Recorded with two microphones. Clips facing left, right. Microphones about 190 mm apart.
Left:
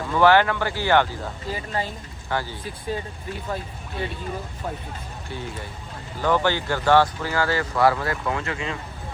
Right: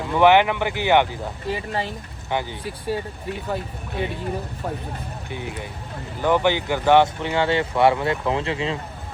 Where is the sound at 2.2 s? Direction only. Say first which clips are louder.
Right 2 dB; 20° right (ahead or behind).